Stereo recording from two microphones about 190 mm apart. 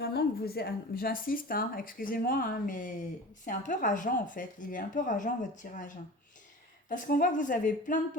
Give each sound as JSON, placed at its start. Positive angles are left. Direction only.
{"t": 0.0, "sound": "speech", "side_deg": 55}